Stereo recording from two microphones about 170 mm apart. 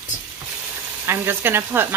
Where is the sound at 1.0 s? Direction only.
15° right (ahead or behind).